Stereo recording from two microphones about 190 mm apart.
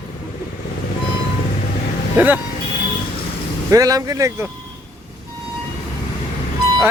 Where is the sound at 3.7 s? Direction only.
20° right (ahead or behind).